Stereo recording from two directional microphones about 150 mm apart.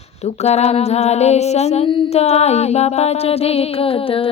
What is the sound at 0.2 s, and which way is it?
Female singing, 45° left (ahead or behind).